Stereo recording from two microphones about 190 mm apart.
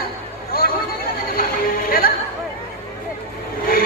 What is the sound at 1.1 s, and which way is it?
Music, 50° left (ahead or behind).